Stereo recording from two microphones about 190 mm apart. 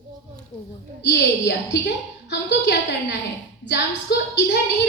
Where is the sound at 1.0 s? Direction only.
65° left (ahead or behind).